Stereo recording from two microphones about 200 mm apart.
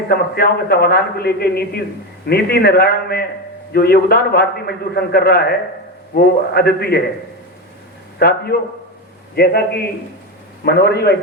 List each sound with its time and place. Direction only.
0.1 s a man's voice: 50° left (ahead or behind)
8.2 s a man's voice: 50° left (ahead or behind)